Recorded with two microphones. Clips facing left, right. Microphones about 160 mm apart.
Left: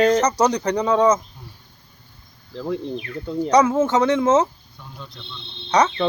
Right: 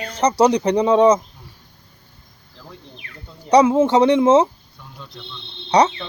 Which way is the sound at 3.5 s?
15° right (ahead or behind).